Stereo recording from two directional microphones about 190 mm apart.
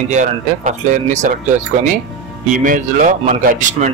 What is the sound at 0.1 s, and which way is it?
Speech, 40° right (ahead or behind).